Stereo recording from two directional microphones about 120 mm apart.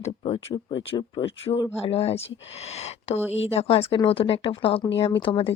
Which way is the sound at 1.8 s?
55° left (ahead or behind).